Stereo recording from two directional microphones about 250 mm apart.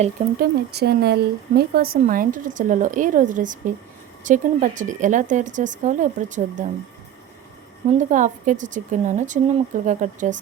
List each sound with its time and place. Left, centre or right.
0.0 s a woman's voice: right
0.7 s speech: right
7.9 s a woman's voice: right